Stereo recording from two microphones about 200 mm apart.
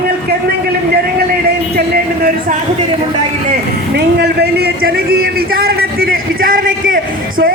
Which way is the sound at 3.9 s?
55° right (ahead or behind).